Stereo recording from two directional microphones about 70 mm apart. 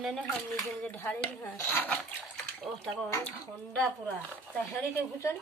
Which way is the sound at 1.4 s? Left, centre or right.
Left.